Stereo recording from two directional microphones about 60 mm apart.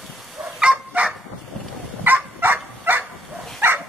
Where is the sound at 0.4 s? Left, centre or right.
Centre.